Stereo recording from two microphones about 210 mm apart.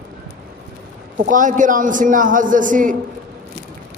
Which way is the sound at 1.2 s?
40° right (ahead or behind).